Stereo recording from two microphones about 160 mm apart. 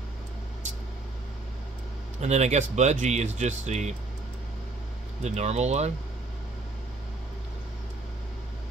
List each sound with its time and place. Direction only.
2.1 s speech: 45° right (ahead or behind)
5.2 s speech: 45° right (ahead or behind)